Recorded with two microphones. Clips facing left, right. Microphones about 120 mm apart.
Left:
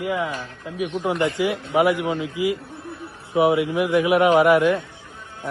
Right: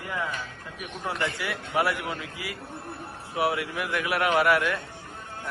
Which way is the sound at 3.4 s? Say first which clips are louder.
Left 9 dB; 20° left (ahead or behind).